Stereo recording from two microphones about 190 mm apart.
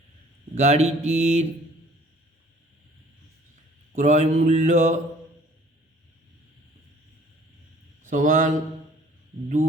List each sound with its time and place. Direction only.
0.5 s mantra: 35° right (ahead or behind)
3.9 s mantra: 40° right (ahead or behind)
8.0 s speech: 45° right (ahead or behind)